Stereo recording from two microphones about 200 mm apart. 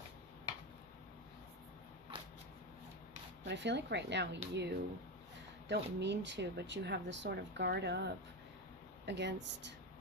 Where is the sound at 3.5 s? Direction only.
60° right (ahead or behind).